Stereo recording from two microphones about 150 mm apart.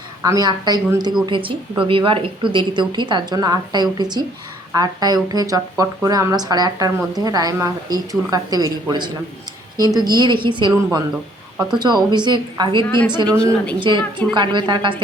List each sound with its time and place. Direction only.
0.2 s a woman's voice: 25° right (ahead or behind)
13.2 s speech: 5° left (ahead or behind)
13.7 s a woman's voice: 30° right (ahead or behind)